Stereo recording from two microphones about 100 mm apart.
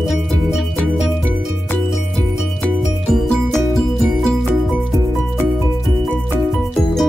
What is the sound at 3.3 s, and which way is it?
Music, 5° left (ahead or behind).